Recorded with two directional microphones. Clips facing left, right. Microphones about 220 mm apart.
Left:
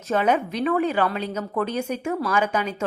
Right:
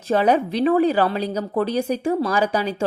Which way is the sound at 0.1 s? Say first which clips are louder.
Right 4 dB; 35° right (ahead or behind).